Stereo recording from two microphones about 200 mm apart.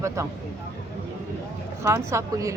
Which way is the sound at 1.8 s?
15° right (ahead or behind).